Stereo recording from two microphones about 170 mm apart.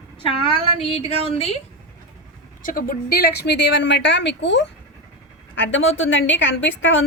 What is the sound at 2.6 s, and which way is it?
A woman's voice, 55° left (ahead or behind).